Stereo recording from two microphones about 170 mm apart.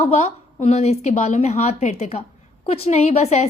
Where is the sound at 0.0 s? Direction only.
40° left (ahead or behind).